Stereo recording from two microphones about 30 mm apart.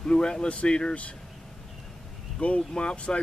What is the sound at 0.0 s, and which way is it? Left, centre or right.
Speech, left.